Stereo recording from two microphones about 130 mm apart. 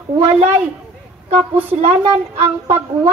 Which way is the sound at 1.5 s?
50° right (ahead or behind).